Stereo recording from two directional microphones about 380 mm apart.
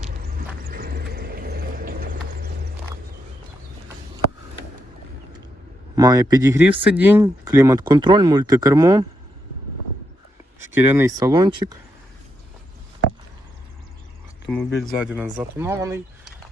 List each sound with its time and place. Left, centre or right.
0.0 s vehicle: right
6.0 s speech: centre
10.6 s speech: centre
14.4 s speech: centre